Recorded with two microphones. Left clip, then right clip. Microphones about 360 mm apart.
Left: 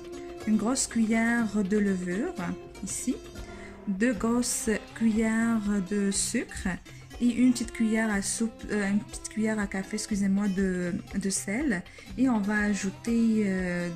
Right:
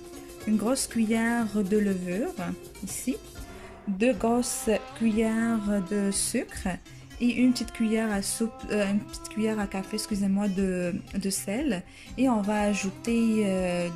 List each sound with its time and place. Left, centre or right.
0.5 s speech: centre